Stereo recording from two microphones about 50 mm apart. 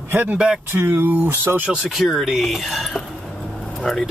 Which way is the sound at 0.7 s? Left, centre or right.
Right.